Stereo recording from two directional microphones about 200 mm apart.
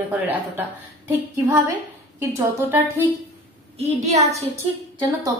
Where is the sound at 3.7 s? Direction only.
35° right (ahead or behind).